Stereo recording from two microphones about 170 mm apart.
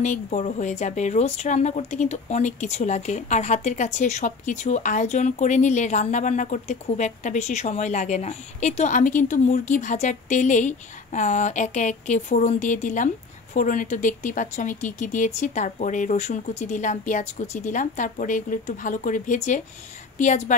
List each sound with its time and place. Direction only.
0.0 s speech: 45° left (ahead or behind)